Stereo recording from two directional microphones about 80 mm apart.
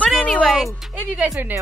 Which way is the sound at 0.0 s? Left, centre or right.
Centre.